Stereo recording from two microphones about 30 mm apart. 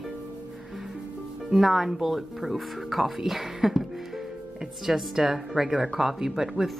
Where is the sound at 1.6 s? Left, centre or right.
Centre.